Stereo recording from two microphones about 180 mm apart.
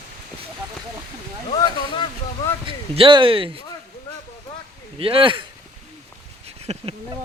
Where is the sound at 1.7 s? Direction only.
25° left (ahead or behind).